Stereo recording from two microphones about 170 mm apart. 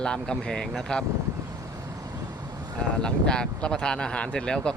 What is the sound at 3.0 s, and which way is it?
Speech, 5° left (ahead or behind).